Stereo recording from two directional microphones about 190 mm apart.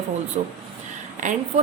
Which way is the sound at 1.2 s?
40° right (ahead or behind).